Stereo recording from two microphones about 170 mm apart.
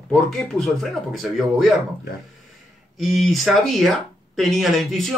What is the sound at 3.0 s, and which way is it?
Speech, centre (ahead or behind).